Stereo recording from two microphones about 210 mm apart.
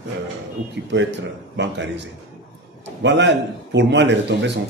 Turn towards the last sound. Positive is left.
turn(degrees=-55)  # may be behind; listen again after turning